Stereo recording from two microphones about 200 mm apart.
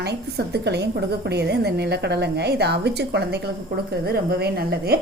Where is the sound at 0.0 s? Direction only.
55° right (ahead or behind).